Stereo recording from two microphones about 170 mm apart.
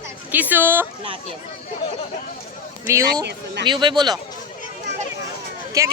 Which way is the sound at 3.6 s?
25° right (ahead or behind).